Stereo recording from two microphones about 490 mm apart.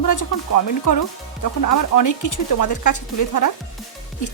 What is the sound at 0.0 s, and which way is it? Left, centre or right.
Speech, left.